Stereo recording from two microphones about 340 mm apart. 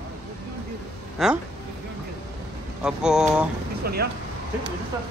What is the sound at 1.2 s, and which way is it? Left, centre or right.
Speech, centre.